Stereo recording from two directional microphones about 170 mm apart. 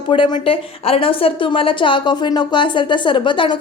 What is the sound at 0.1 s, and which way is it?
A woman's voice, 30° left (ahead or behind).